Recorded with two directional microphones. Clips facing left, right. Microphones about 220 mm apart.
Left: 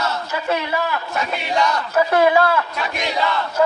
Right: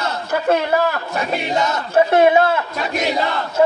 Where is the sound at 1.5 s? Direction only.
25° right (ahead or behind).